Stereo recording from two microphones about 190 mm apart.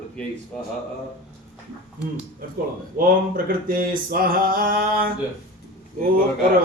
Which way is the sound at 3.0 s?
45° right (ahead or behind).